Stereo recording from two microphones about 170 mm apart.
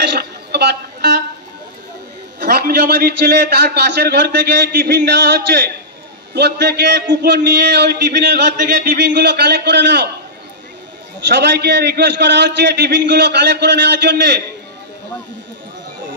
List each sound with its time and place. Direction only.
0.0 s a man's voice: 75° right (ahead or behind)
2.4 s a man's voice: 60° right (ahead or behind); by 10.0 s 85° right
11.2 s a man's voice: 90° right